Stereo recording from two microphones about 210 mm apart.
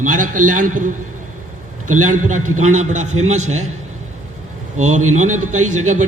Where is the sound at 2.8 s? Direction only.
35° right (ahead or behind).